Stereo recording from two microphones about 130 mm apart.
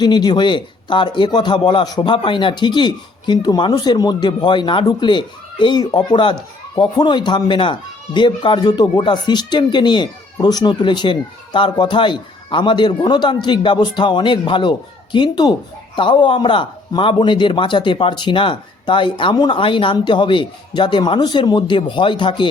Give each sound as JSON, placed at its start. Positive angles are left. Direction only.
{"t": 0.0, "sound": "a man's voice", "side_deg": 35}